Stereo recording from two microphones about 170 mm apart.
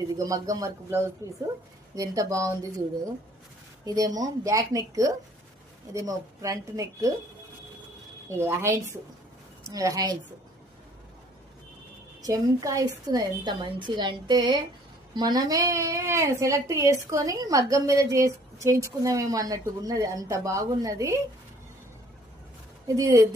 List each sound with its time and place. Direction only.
0.2 s a woman's voice: 20° right (ahead or behind)
3.8 s a woman's voice: 20° right (ahead or behind)
8.3 s a woman's voice: 15° right (ahead or behind)
12.2 s a woman's voice: 20° right (ahead or behind)
22.9 s a woman's voice: 20° right (ahead or behind)